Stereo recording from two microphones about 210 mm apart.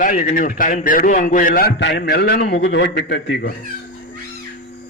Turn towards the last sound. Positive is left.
turn(degrees=55)  # may be behind; listen again after turning